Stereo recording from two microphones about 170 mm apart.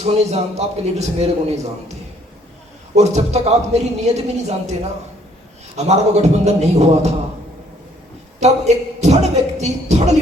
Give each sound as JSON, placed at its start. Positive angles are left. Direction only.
{"t": 0.0, "sound": "a man's voice", "side_deg": -40}
{"t": 2.9, "sound": "a man's voice", "side_deg": -40}
{"t": 5.7, "sound": "a man's voice", "side_deg": -40}
{"t": 8.4, "sound": "a man's voice", "side_deg": -40}